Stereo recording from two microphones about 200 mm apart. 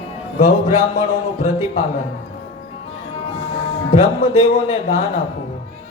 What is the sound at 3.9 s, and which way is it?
Speech, 30° left (ahead or behind).